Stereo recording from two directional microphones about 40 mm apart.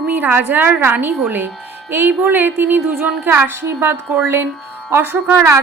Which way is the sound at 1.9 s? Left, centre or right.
Right.